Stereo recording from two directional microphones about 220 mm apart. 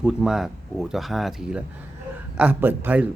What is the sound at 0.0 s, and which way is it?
Speech, 5° right (ahead or behind).